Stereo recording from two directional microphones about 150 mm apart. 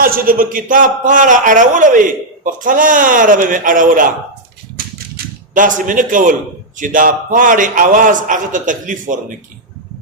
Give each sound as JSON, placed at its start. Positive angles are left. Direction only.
{"t": 0.0, "sound": "a man's voice", "side_deg": -75}
{"t": 5.1, "sound": "a man's voice", "side_deg": -60}